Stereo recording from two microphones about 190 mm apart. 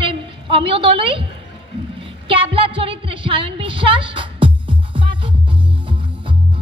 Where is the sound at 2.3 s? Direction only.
30° right (ahead or behind).